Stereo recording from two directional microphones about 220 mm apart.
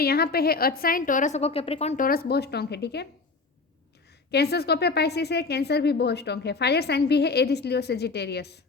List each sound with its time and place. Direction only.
0.0 s a woman's voice: 45° left (ahead or behind); by 2.0 s 30° left (ahead or behind)
2.0 s a woman's voice: 45° left (ahead or behind)
4.3 s a woman's voice: 45° left (ahead or behind)